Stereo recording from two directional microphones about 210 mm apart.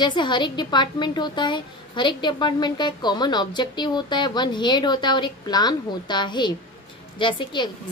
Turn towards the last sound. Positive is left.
turn(degrees=25)  # may be behind; listen again after turning